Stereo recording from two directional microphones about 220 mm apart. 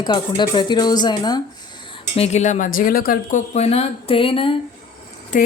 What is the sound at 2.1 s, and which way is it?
Speech, 30° left (ahead or behind).